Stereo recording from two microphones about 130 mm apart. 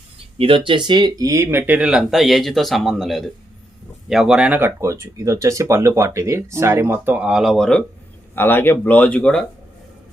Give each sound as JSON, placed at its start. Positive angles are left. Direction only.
{"t": 0.3, "sound": "speech", "side_deg": -45}
{"t": 8.4, "sound": "speech", "side_deg": 15}